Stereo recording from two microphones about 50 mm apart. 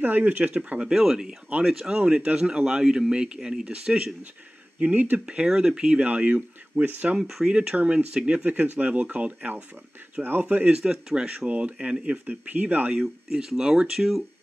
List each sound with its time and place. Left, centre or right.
0.0 s speech: right
0.9 s speech: centre
2.0 s speech: right
4.7 s speech: right
5.2 s speech: centre
6.0 s speech: right
7.2 s speech: centre
7.5 s speech: right
10.8 s speech: centre
11.2 s speech: right
13.0 s speech: centre